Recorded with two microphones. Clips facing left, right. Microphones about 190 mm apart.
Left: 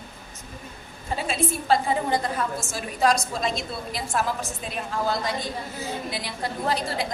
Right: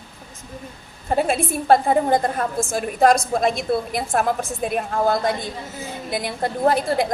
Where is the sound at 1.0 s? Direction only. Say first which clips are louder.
Right 6 dB; 55° right (ahead or behind).